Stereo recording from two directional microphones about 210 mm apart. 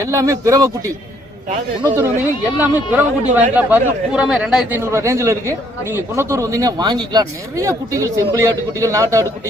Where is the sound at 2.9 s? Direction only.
10° right (ahead or behind).